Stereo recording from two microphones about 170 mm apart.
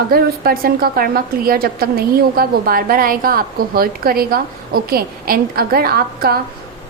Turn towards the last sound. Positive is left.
turn(degrees=-65)  # may be behind; listen again after turning